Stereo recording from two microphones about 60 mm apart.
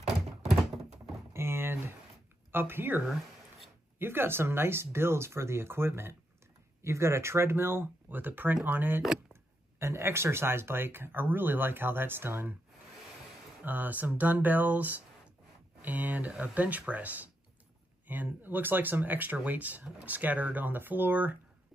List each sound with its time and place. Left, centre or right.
1.3 s a sound: right
2.5 s speech: right
4.0 s speech: right
9.3 s speech: right
13.7 s speech: right